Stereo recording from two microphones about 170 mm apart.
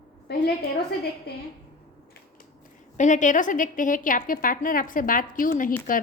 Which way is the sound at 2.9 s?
45° left (ahead or behind).